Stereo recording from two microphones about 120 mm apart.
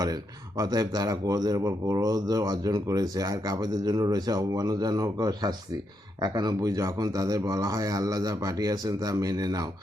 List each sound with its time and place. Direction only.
0.0 s speech: 35° right (ahead or behind)